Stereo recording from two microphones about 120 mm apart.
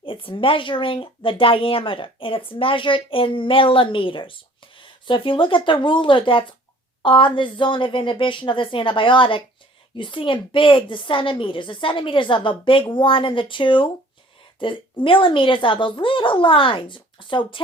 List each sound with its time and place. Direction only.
0.0 s speech: 50° left (ahead or behind)